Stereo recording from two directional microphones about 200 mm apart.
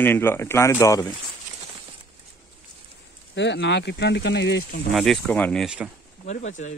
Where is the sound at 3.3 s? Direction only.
60° left (ahead or behind).